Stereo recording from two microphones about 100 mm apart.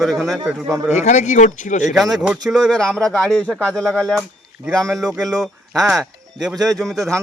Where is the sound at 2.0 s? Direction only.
Centre (ahead or behind).